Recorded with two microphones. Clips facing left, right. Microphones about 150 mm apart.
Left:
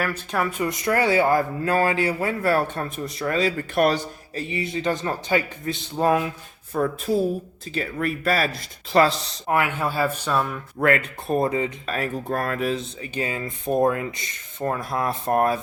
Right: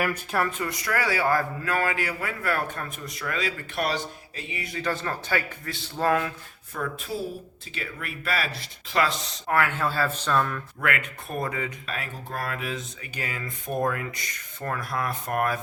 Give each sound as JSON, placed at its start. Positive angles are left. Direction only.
{"t": 0.0, "sound": "speech", "side_deg": -10}
{"t": 0.3, "sound": "speech", "side_deg": 10}
{"t": 0.6, "sound": "speech", "side_deg": 20}
{"t": 3.8, "sound": "speech", "side_deg": 45}
{"t": 6.7, "sound": "speech", "side_deg": 35}
{"t": 9.5, "sound": "speech", "side_deg": 15}
{"t": 10.8, "sound": "speech", "side_deg": 35}
{"t": 11.9, "sound": "speech", "side_deg": 45}